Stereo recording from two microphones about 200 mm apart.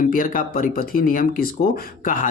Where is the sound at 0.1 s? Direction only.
45° left (ahead or behind).